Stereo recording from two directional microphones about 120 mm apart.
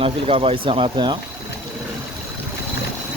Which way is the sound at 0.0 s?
55° right (ahead or behind).